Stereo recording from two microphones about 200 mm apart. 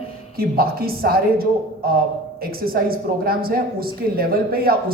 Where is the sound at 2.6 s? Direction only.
50° right (ahead or behind).